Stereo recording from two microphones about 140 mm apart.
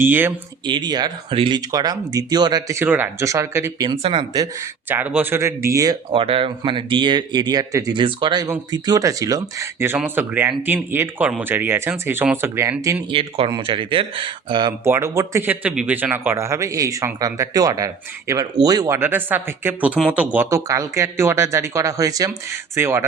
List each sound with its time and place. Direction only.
0.0 s speech: 15° right (ahead or behind)
0.6 s speech: 35° right (ahead or behind)
3.8 s speech: 40° right (ahead or behind)
4.9 s speech: 10° right (ahead or behind)
6.1 s speech: 40° right (ahead or behind); by 12.7 s 20° right (ahead or behind)
13.1 s speech: 40° right (ahead or behind)
14.8 s speech: 20° right (ahead or behind)
18.9 s speech: 15° right (ahead or behind)